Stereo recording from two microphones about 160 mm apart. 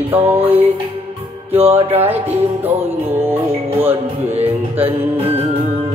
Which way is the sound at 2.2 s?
10° right (ahead or behind).